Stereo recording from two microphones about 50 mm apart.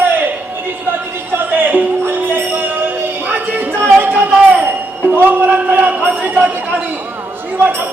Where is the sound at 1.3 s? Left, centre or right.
Right.